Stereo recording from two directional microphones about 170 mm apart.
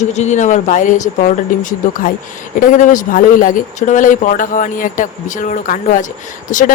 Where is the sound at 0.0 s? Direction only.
45° left (ahead or behind).